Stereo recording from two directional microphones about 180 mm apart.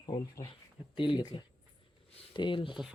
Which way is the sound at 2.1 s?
25° left (ahead or behind).